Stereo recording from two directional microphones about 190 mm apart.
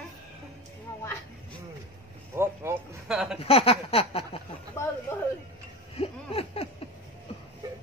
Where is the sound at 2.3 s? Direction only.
10° right (ahead or behind).